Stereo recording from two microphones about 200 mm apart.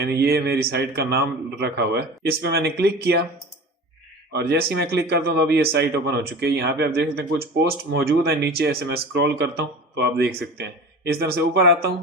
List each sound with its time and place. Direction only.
0.0 s speech: 55° right (ahead or behind)
4.3 s speech: 55° right (ahead or behind)